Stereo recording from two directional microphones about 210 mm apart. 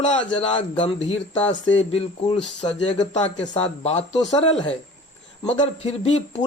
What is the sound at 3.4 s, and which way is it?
Speech, 25° left (ahead or behind).